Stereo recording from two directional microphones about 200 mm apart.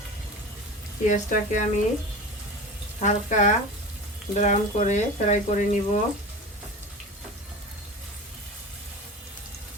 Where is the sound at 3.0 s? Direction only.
40° left (ahead or behind).